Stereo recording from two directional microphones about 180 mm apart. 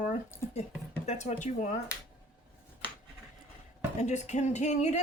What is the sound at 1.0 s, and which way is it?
Speech, 40° left (ahead or behind).